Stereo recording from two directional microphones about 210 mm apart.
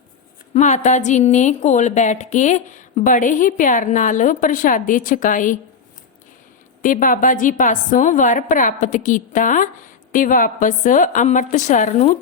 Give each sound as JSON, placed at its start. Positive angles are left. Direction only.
{"t": 0.5, "sound": "speech", "side_deg": 35}
{"t": 6.8, "sound": "speech", "side_deg": 40}